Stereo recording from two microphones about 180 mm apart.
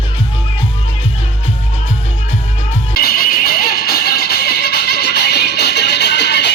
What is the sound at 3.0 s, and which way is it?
Music, 55° left (ahead or behind).